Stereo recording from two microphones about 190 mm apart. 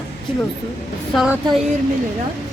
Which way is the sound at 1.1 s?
5° right (ahead or behind).